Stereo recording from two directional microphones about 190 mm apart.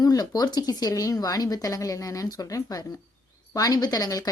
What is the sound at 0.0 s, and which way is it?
Speech, 20° left (ahead or behind).